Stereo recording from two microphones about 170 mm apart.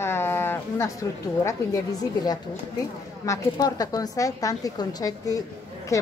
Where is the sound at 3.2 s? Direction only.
20° left (ahead or behind).